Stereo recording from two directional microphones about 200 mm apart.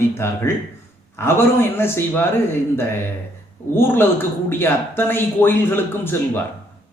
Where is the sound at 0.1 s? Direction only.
15° left (ahead or behind).